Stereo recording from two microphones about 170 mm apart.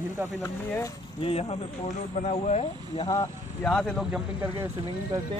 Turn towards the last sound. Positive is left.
turn(degrees=-15)  # may be behind; listen again after turning